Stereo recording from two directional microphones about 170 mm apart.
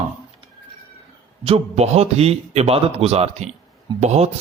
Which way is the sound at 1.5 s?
40° right (ahead or behind).